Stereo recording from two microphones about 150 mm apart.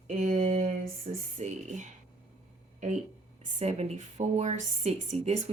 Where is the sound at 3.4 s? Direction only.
45° right (ahead or behind).